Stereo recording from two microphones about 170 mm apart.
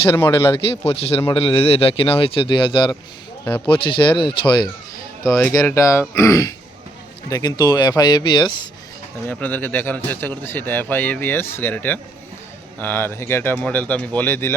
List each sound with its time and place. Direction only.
0.1 s a man's voice: 15° left (ahead or behind)
0.5 s a man's voice: 35° left (ahead or behind)
9.2 s a man's voice: 10° left (ahead or behind)